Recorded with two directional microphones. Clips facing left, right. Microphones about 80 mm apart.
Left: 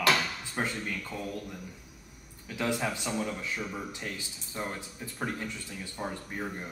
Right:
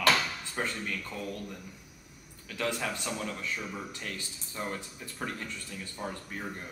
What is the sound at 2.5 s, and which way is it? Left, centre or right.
Speech, centre.